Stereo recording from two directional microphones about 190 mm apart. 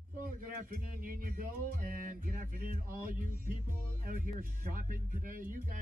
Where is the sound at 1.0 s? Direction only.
45° right (ahead or behind).